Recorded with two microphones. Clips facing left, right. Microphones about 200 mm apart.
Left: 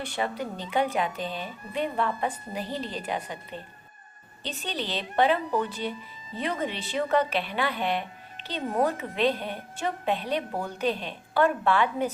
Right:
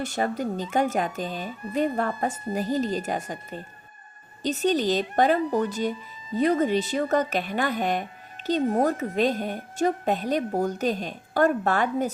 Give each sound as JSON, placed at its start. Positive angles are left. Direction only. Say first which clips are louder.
{"t": 0.0, "sound": "speech", "louder": "right 4 dB", "side_deg": -45}